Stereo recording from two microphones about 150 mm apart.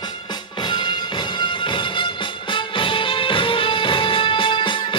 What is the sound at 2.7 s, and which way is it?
Music, 35° left (ahead or behind).